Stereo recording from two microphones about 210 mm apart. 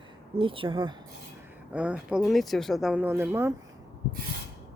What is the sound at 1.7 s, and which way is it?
Speech, 5° right (ahead or behind).